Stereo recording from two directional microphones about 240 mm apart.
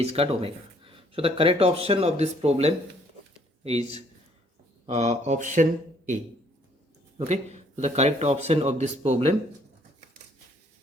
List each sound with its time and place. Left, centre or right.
0.0 s speech: right
4.9 s speech: right
7.2 s speech: right